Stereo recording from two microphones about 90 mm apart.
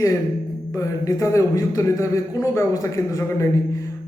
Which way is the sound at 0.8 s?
35° left (ahead or behind).